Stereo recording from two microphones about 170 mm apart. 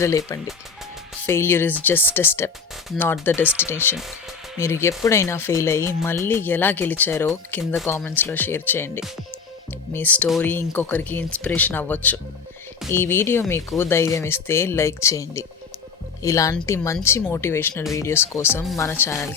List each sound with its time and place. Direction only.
1.3 s a woman's voice: 15° left (ahead or behind)